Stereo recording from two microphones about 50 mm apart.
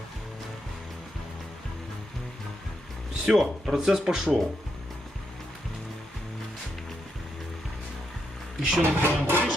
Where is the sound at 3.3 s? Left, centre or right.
Centre.